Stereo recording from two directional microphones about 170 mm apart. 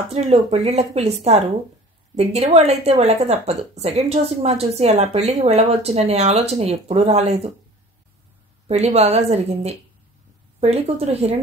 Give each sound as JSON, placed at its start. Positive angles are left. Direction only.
{"t": 0.1, "sound": "a woman's voice", "side_deg": -40}
{"t": 8.6, "sound": "a woman's voice", "side_deg": -40}